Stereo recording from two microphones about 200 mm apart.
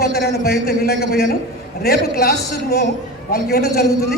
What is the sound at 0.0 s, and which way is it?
A man's voice, 55° left (ahead or behind).